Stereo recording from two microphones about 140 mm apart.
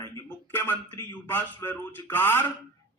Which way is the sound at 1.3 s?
15° left (ahead or behind).